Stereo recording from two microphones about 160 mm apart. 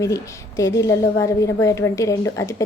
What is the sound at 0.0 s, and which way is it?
A woman's voice, 20° left (ahead or behind).